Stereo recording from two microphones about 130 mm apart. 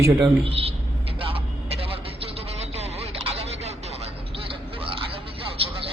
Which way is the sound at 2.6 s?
55° right (ahead or behind).